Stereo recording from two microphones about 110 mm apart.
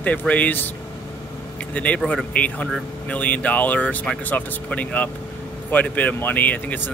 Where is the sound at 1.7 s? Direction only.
10° left (ahead or behind).